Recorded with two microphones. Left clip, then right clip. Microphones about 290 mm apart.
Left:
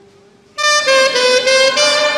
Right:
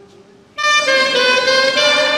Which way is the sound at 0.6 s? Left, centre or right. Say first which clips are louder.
Left 2 dB; left.